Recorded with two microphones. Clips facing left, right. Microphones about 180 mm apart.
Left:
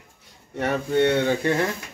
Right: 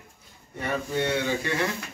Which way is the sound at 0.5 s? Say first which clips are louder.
Left 6 dB; 70° left (ahead or behind).